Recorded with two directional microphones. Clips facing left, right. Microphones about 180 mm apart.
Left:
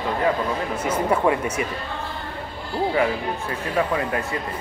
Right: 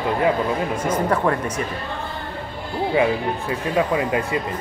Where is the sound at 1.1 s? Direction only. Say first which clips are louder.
Even; 10° left (ahead or behind).